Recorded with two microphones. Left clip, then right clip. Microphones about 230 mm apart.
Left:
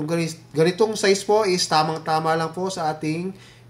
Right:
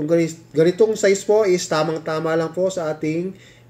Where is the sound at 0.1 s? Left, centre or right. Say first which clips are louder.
Right 10 dB; centre.